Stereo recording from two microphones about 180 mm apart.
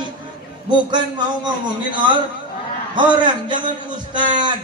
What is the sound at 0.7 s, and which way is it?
A man's voice, 25° right (ahead or behind).